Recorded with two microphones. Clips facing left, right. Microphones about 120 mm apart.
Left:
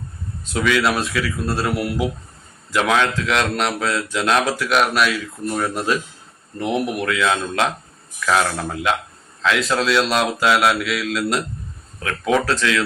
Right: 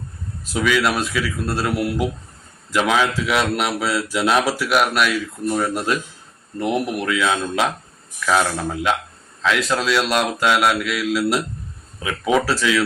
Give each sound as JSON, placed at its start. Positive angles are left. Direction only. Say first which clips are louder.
{"t": 0.4, "sound": "a man's voice", "louder": "even", "side_deg": -5}